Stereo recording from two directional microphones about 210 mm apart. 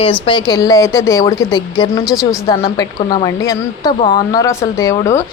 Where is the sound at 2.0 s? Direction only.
Centre (ahead or behind).